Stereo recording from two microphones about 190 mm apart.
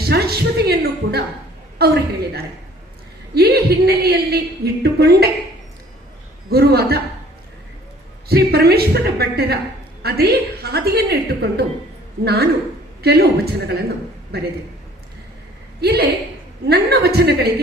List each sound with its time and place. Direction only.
0.0 s a woman's voice: 55° right (ahead or behind)
6.5 s a woman's voice: 55° right (ahead or behind)
8.3 s a woman's voice: 55° right (ahead or behind)
15.8 s a woman's voice: 55° right (ahead or behind)